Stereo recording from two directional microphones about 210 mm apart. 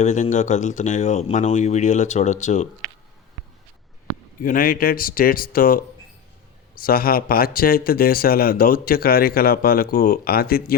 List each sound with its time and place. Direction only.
0.0 s speech: 35° left (ahead or behind)
4.1 s speech: 40° left (ahead or behind)